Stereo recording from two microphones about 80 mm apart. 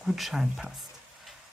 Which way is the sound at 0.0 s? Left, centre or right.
Centre.